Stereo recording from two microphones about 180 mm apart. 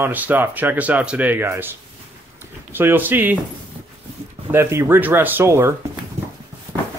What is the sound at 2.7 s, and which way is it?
Speech, 10° right (ahead or behind).